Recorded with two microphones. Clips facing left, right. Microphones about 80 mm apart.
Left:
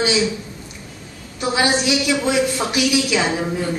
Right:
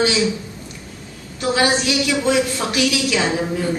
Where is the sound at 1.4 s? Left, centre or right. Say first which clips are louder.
Right 1 dB; centre.